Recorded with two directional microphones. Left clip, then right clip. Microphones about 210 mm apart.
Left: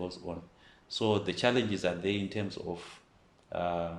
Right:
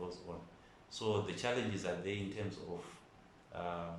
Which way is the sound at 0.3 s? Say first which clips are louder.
Left 7 dB; 45° left (ahead or behind).